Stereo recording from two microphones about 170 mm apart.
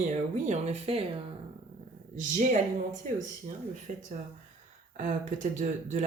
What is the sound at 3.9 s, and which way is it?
Speech, 45° right (ahead or behind).